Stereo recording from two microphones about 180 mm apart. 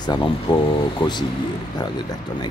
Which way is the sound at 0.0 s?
25° left (ahead or behind).